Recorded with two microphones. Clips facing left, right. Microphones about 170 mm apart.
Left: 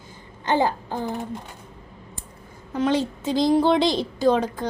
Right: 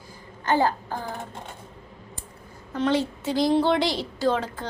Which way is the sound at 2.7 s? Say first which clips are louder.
Left 1 dB; 15° left (ahead or behind).